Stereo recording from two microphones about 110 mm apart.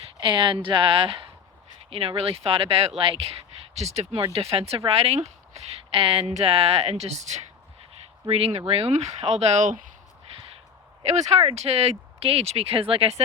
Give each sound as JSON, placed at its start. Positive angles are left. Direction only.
{"t": 0.0, "sound": "a woman's voice", "side_deg": -50}
{"t": 3.8, "sound": "speech", "side_deg": -80}
{"t": 4.3, "sound": "a woman's voice", "side_deg": -60}
{"t": 6.0, "sound": "a woman's voice", "side_deg": -60}
{"t": 8.3, "sound": "speech", "side_deg": -65}
{"t": 11.1, "sound": "speech", "side_deg": -80}